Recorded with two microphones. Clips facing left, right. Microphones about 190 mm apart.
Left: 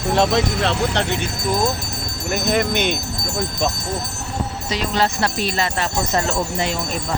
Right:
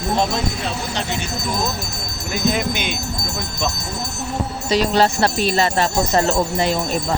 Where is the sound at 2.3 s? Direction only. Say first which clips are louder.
Left 1 dB; 60° left (ahead or behind).